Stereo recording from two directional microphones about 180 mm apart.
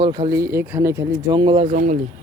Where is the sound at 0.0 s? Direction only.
25° right (ahead or behind).